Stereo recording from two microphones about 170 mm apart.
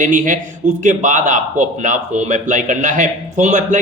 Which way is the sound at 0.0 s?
50° right (ahead or behind).